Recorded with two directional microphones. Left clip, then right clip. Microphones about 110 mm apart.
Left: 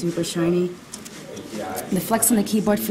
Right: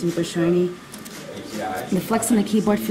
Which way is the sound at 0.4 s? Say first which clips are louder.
Right 1 dB; 25° left (ahead or behind).